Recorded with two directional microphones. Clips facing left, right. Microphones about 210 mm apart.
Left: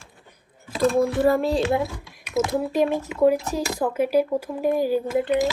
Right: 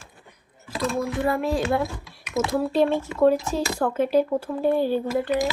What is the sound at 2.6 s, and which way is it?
Speech, 15° left (ahead or behind).